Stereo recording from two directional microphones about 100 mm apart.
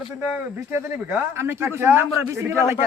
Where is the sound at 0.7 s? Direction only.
25° right (ahead or behind).